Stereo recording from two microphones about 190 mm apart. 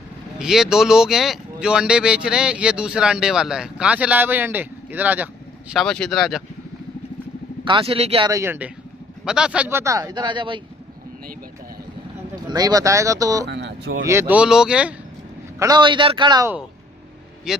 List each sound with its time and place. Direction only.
0.4 s speech: 5° right (ahead or behind)
7.6 s a man's voice: 25° right (ahead or behind)
8.3 s speech: 15° right (ahead or behind)
12.4 s speech: 20° right (ahead or behind)
13.5 s speech: 65° right (ahead or behind)
14.0 s speech: 10° right (ahead or behind)
15.6 s a man's voice: 20° right (ahead or behind)
17.5 s speech: 5° right (ahead or behind)